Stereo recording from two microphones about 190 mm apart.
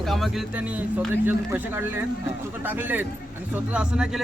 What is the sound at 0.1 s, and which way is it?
Speech, centre (ahead or behind).